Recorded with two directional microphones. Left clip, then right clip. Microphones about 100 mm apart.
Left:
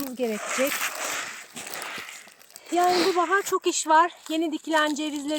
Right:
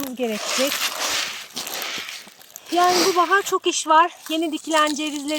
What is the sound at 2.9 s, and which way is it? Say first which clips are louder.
Speech: right 4 dB; 15° right (ahead or behind).